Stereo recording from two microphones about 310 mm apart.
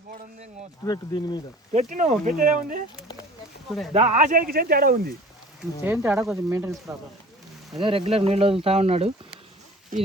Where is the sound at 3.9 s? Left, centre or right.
Right.